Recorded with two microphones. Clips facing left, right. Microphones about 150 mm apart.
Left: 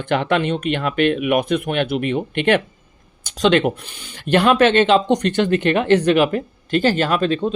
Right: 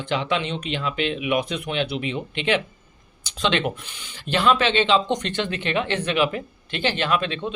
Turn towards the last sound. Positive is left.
turn(degrees=40)  # may be behind; listen again after turning